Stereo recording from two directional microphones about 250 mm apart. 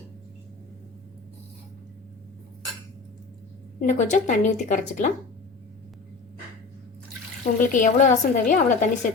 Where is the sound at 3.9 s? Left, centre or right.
Left.